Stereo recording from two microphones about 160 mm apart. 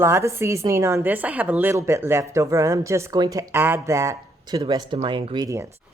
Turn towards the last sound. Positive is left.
turn(degrees=-20)  # may be behind; listen again after turning